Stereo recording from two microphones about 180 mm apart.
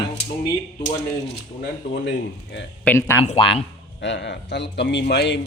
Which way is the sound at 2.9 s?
15° left (ahead or behind).